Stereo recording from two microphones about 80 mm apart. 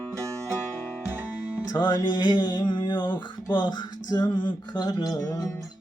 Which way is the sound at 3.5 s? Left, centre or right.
Left.